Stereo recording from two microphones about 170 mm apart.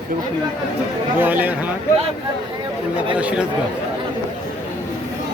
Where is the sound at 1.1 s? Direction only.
10° right (ahead or behind).